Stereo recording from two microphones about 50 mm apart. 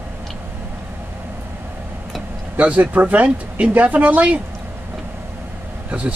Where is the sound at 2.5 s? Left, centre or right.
Right.